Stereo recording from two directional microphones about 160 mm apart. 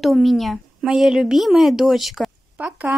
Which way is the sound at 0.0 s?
Centre (ahead or behind).